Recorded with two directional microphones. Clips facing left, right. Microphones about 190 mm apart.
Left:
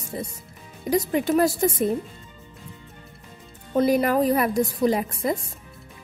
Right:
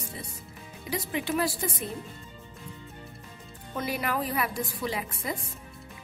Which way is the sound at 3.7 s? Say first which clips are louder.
Left 11 dB; 40° left (ahead or behind).